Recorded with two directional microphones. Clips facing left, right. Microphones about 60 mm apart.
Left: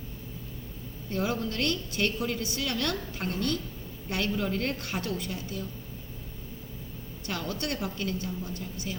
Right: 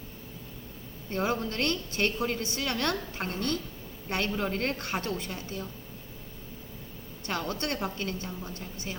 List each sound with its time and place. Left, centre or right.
1.1 s a woman's voice: right
7.3 s a woman's voice: right